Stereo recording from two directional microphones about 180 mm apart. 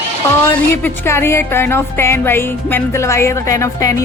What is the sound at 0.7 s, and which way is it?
Speech, 10° left (ahead or behind).